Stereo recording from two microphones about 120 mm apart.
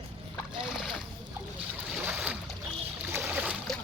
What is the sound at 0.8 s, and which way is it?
Splash, 5° right (ahead or behind).